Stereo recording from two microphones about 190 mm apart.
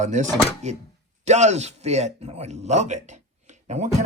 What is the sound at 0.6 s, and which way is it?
Speech, 35° right (ahead or behind).